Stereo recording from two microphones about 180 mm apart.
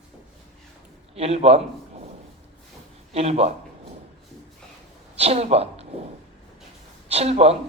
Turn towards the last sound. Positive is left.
turn(degrees=-35)  # may be behind; listen again after turning